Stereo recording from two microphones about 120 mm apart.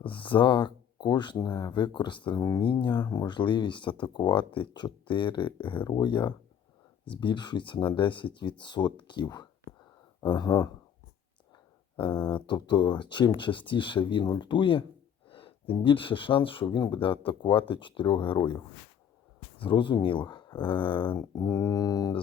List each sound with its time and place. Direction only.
0.0 s speech: 45° left (ahead or behind)
11.9 s speech: 40° left (ahead or behind)